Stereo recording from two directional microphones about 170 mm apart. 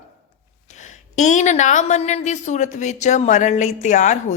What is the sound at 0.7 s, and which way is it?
A woman's voice, 45° left (ahead or behind).